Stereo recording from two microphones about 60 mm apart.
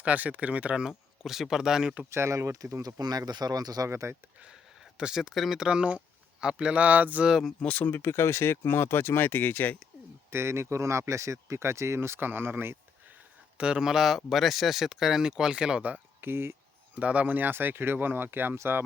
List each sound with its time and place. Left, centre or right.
0.0 s speech: right
0.9 s speech: centre
2.0 s speech: right
2.8 s speech: right
3.8 s speech: right
4.9 s speech: centre
5.6 s speech: centre
7.6 s speech: left
7.9 s speech: left
10.3 s speech: right
13.6 s speech: centre
16.2 s speech: right
16.9 s speech: right